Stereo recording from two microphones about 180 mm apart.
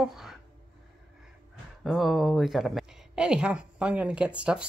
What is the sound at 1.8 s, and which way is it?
Speech, centre (ahead or behind).